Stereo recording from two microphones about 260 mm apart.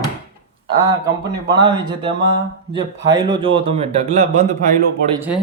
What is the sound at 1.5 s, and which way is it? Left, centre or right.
A man's voice, centre.